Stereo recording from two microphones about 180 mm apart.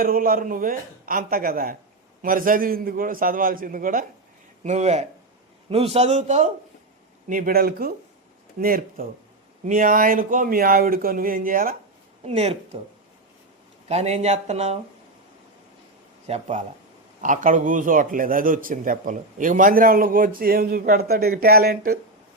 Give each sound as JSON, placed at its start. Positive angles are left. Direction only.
{"t": 0.0, "sound": "a man's voice", "side_deg": -55}
{"t": 4.6, "sound": "speech", "side_deg": -40}
{"t": 7.3, "sound": "a man's voice", "side_deg": -50}
{"t": 12.2, "sound": "speech", "side_deg": -35}
{"t": 13.8, "sound": "speech", "side_deg": -35}
{"t": 16.2, "sound": "a man's voice", "side_deg": -40}